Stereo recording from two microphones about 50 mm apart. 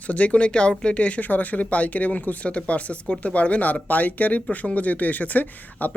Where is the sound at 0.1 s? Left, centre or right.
Left.